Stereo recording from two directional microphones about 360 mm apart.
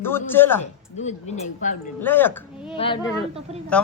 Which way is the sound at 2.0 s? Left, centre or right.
Centre.